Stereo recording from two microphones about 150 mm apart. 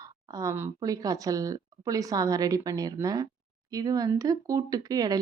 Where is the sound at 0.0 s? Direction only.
25° right (ahead or behind).